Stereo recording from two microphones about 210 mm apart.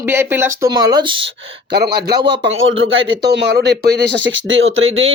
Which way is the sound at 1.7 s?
50° right (ahead or behind).